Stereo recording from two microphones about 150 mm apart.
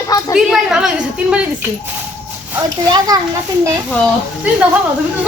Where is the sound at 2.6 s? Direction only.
25° right (ahead or behind).